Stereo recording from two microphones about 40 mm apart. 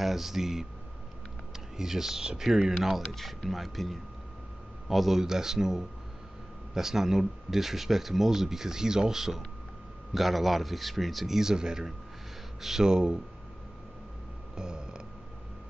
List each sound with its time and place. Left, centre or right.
0.0 s speech: centre
1.8 s speech: centre
12.9 s speech: right
14.6 s a sound: centre